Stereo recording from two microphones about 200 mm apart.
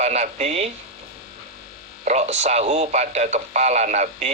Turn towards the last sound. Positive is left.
turn(degrees=-35)  # may be behind; listen again after turning